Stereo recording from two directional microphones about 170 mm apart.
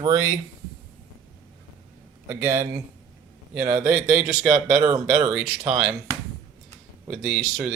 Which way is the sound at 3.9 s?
5° right (ahead or behind).